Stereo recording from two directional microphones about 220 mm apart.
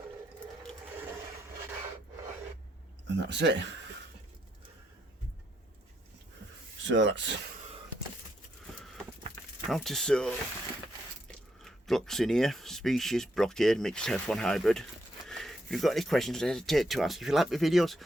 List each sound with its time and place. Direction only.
3.1 s speech: 50° right (ahead or behind)
6.8 s speech: 55° right (ahead or behind)
9.6 s speech: centre (ahead or behind)